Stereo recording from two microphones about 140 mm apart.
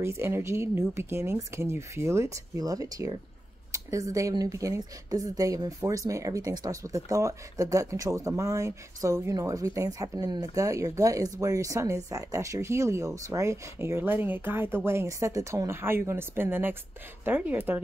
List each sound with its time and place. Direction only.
0.0 s a woman's voice: 20° right (ahead or behind)